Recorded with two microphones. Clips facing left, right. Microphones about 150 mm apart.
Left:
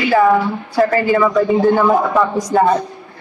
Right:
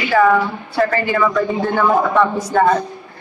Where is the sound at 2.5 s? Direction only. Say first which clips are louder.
Left 1 dB; 20° left (ahead or behind).